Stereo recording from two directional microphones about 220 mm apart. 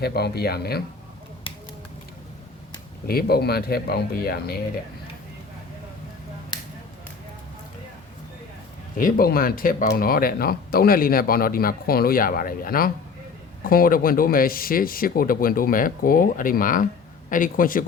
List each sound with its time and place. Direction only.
0.0 s speech: 45° left (ahead or behind)
3.1 s speech: 45° left (ahead or behind)
9.0 s speech: 40° left (ahead or behind)